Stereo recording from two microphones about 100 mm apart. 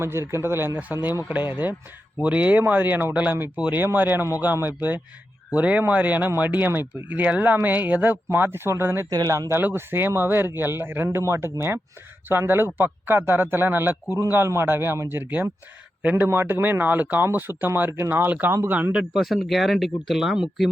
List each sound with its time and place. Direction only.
0.0 s speech: 25° right (ahead or behind)
9.0 s speech: 35° right (ahead or behind); by 19.0 s 15° right (ahead or behind)
19.1 s speech: centre (ahead or behind)